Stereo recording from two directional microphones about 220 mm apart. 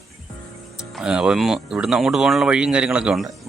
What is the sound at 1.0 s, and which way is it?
Speech, 5° right (ahead or behind).